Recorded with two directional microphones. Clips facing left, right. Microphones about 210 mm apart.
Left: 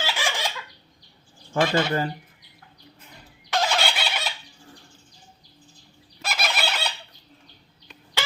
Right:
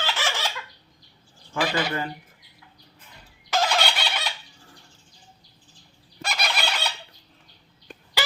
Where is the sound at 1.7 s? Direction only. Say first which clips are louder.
Left 4 dB; 35° left (ahead or behind).